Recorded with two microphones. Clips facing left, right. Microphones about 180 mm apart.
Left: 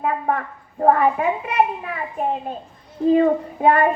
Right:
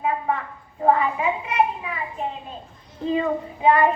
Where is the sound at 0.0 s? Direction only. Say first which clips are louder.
Left 2 dB; 55° left (ahead or behind).